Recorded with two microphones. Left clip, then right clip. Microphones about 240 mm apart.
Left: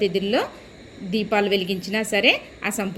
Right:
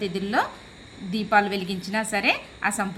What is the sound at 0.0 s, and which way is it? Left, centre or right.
A woman's voice, centre.